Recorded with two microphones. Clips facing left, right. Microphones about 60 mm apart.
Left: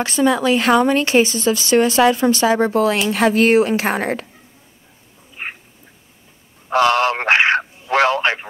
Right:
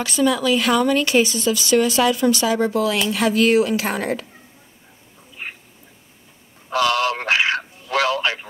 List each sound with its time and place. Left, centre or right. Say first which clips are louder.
0.0 s speech: left 3 dB; left
5.4 s duck: left 4 dB; left
6.7 s speech: left 4 dB; left